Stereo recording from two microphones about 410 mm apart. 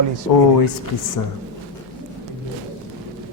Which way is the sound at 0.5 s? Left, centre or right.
Left.